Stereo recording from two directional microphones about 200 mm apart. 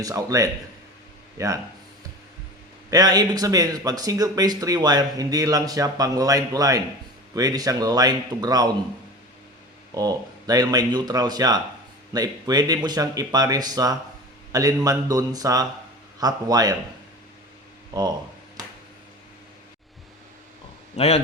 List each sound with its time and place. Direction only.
0.0 s speech: 15° right (ahead or behind)
2.9 s speech: 20° right (ahead or behind)
9.9 s speech: 20° right (ahead or behind)
20.9 s a man's voice: 30° left (ahead or behind)